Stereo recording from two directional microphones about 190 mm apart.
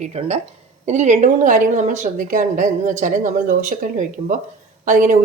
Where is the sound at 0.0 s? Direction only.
35° right (ahead or behind).